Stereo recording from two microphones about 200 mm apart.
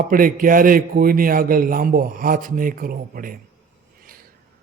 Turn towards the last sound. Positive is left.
turn(degrees=-45)  # may be behind; listen again after turning